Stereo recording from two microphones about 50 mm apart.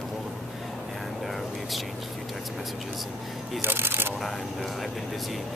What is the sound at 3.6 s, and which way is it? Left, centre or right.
Speech, right.